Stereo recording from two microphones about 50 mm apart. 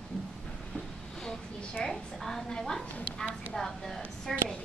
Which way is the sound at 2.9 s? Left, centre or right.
Left.